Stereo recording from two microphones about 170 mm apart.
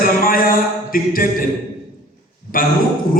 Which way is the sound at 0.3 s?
55° left (ahead or behind).